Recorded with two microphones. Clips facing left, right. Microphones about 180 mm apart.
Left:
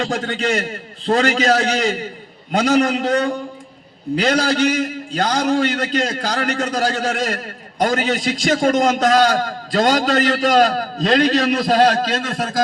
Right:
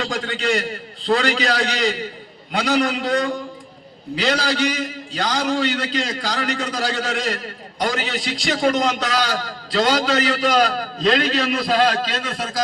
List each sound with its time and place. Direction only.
0.1 s a man's voice: 45° left (ahead or behind)